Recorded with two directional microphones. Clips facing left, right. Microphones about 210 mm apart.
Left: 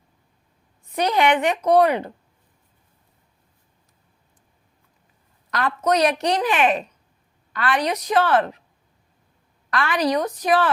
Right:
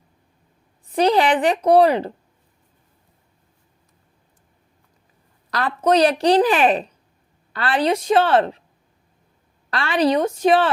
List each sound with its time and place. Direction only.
0.9 s a woman's voice: 30° right (ahead or behind)
5.5 s a woman's voice: 30° right (ahead or behind)
9.6 s a woman's voice: 30° right (ahead or behind)